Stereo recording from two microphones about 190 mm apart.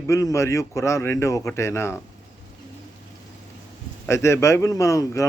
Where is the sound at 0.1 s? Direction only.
15° left (ahead or behind).